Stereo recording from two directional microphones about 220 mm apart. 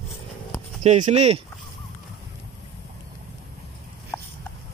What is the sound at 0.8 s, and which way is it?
Speech, 30° right (ahead or behind).